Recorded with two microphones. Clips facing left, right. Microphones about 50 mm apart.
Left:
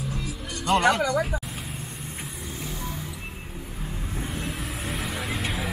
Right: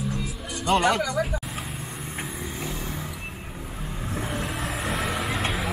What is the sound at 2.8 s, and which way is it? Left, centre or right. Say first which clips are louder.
Vehicle: right 1 dB; centre.